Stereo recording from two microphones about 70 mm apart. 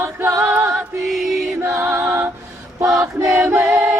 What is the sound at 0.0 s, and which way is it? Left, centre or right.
Music, right.